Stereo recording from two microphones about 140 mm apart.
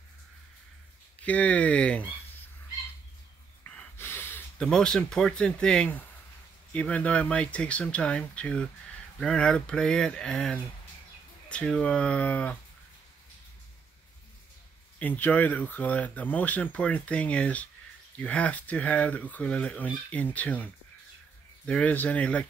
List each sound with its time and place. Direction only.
1.2 s speech: 10° left (ahead or behind)
3.6 s gasp: 15° left (ahead or behind)
6.7 s speech: 10° left (ahead or behind)
15.0 s speech: 10° left (ahead or behind)